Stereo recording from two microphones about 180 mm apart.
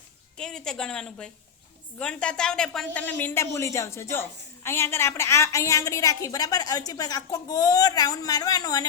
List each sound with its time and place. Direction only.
0.3 s a woman's voice: 5° left (ahead or behind); by 8.9 s 20° left (ahead or behind)